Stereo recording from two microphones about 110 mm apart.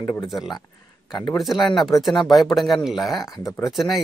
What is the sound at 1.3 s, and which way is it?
Speech, centre (ahead or behind).